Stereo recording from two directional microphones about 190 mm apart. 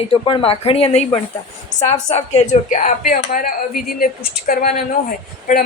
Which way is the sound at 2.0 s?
35° left (ahead or behind).